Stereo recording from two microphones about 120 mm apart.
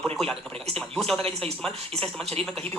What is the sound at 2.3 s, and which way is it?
Speech, 55° right (ahead or behind).